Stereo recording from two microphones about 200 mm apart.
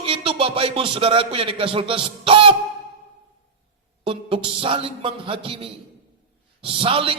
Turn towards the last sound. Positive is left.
turn(degrees=-25)  # may be behind; listen again after turning